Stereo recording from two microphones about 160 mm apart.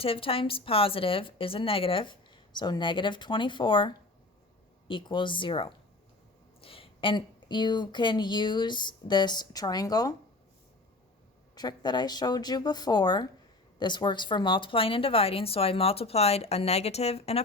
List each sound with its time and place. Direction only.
0.0 s a woman's voice: 35° left (ahead or behind)
11.5 s a woman's voice: 25° left (ahead or behind)